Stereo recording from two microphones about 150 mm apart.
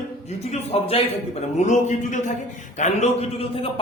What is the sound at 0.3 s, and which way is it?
A man's voice, 45° left (ahead or behind).